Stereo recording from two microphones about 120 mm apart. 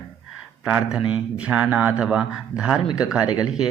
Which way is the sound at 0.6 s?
5° right (ahead or behind).